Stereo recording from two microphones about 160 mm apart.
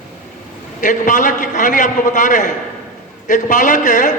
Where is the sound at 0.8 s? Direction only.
50° left (ahead or behind).